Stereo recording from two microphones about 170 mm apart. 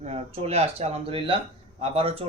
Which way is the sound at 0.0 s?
40° right (ahead or behind).